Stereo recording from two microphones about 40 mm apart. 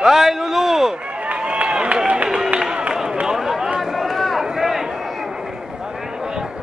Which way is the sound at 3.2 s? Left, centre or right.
Centre.